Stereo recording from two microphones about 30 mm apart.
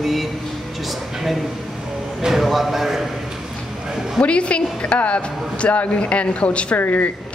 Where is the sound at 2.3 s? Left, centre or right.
Centre.